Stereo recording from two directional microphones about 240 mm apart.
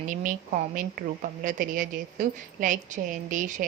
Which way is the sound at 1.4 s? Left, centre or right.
Right.